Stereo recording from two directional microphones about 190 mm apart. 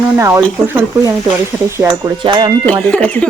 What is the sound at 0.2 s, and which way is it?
Speech, 15° right (ahead or behind).